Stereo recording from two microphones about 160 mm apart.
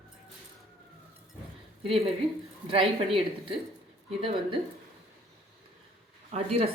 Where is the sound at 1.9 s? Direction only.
35° right (ahead or behind).